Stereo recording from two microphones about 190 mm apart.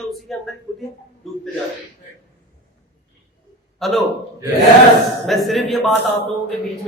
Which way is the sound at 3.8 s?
Centre (ahead or behind).